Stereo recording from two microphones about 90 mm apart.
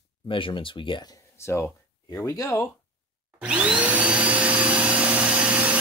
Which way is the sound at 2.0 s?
40° left (ahead or behind).